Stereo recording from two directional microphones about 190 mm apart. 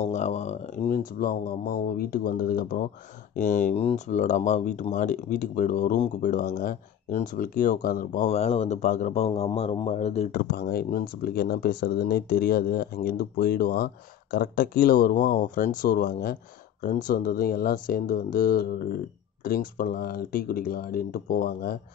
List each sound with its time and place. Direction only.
0.0 s speech: 35° left (ahead or behind)
10.3 s speech: 55° left (ahead or behind)